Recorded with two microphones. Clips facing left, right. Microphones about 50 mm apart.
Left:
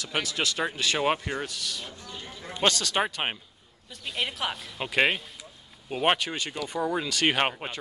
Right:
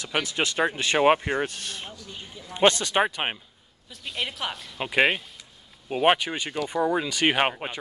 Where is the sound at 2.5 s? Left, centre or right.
Right.